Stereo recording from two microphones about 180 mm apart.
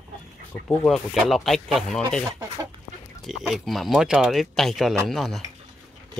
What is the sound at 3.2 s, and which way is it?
Speech, centre (ahead or behind).